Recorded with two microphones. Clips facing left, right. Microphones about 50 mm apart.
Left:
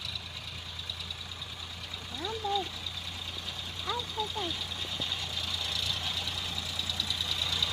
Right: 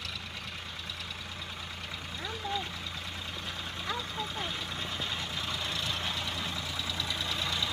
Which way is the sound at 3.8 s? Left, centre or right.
Right.